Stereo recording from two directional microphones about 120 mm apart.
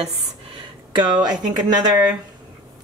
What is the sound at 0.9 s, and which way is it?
Speech, 40° right (ahead or behind).